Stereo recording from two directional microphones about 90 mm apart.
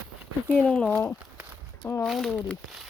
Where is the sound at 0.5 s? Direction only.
10° left (ahead or behind).